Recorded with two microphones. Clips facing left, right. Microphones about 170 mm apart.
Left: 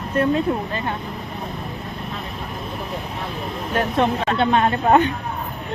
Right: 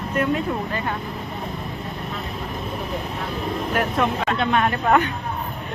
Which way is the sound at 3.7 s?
30° left (ahead or behind).